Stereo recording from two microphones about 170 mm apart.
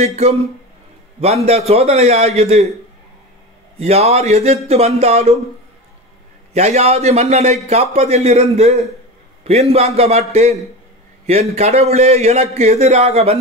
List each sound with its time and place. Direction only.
0.0 s a man's voice: 40° right (ahead or behind)
3.7 s a man's voice: 40° right (ahead or behind)
6.5 s a man's voice: 40° right (ahead or behind)